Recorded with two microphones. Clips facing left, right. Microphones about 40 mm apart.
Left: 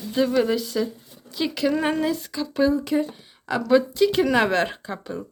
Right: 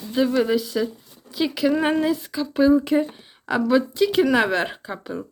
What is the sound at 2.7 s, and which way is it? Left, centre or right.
Speech, right.